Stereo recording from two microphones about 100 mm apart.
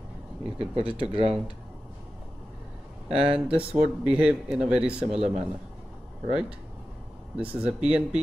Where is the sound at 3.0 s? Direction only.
70° right (ahead or behind).